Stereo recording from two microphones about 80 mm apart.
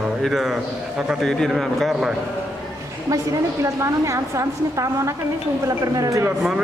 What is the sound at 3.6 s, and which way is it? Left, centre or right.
A woman's voice, right.